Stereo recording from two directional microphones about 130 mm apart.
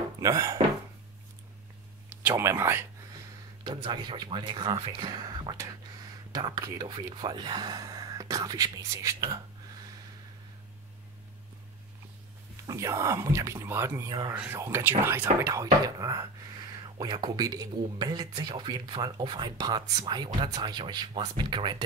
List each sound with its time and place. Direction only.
0.2 s speech: 25° right (ahead or behind)
2.2 s speech: 20° right (ahead or behind)
3.6 s speech: 35° right (ahead or behind)
12.6 s speech: 25° right (ahead or behind)